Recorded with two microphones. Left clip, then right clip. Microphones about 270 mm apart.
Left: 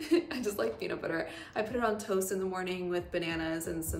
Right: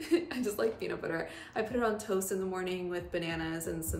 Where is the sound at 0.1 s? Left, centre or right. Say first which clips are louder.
Left 1 dB; centre.